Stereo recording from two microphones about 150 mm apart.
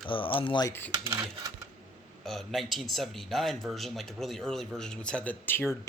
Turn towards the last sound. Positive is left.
turn(degrees=15)  # may be behind; listen again after turning